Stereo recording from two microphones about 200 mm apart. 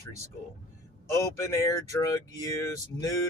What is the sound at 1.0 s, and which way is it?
Speech, 15° left (ahead or behind).